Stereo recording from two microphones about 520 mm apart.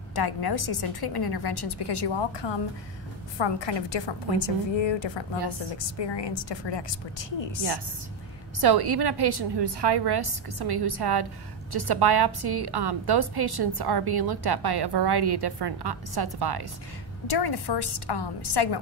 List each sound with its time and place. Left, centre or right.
0.1 s a woman's voice: left
8.5 s a woman's voice: right
17.3 s a woman's voice: left